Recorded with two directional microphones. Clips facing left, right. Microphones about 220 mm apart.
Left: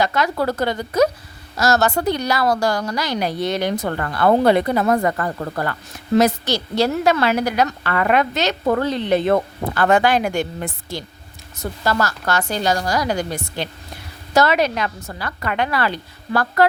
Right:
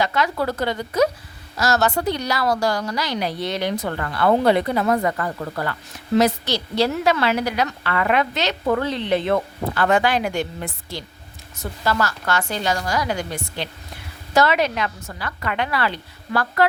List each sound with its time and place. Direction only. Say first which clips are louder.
0.0 s a woman's voice: left 2 dB; 45° left (ahead or behind)